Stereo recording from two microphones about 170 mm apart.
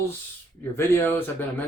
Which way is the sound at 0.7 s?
15° left (ahead or behind).